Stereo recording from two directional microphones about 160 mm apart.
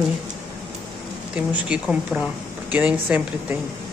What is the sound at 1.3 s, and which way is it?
Speech, 5° right (ahead or behind).